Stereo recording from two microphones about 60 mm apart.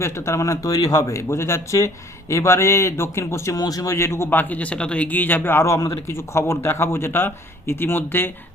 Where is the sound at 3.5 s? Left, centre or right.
Left.